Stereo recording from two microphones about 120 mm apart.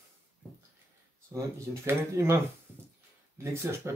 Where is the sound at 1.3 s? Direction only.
20° right (ahead or behind).